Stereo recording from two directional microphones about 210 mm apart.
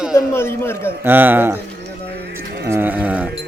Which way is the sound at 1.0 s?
10° right (ahead or behind).